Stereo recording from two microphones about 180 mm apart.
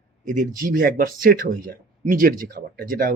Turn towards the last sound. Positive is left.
turn(degrees=-55)  # may be behind; listen again after turning